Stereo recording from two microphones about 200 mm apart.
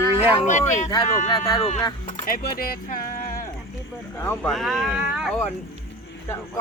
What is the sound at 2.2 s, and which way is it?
Speech, 45° left (ahead or behind).